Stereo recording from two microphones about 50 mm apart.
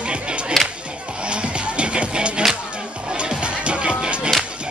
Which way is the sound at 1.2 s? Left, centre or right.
Right.